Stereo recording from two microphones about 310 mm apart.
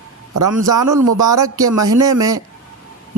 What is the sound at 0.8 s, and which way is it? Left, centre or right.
Speech, right.